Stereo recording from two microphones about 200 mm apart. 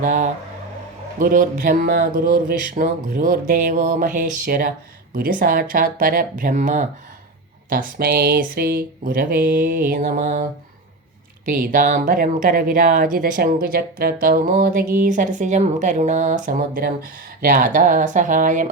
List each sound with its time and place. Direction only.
0.0 s speech: 40° right (ahead or behind)
11.4 s speech: 40° right (ahead or behind)